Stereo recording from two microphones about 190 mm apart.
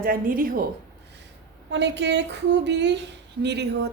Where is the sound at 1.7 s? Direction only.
65° right (ahead or behind).